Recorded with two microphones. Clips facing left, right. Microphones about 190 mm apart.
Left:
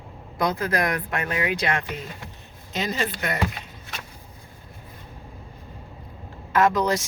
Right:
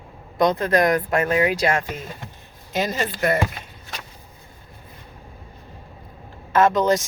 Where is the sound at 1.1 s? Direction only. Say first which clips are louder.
Right 7 dB; 40° right (ahead or behind).